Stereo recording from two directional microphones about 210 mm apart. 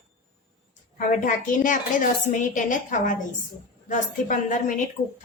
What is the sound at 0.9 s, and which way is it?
A woman's voice, 40° left (ahead or behind).